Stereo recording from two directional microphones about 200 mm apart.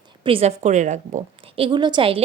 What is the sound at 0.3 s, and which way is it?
A woman's voice, 30° right (ahead or behind).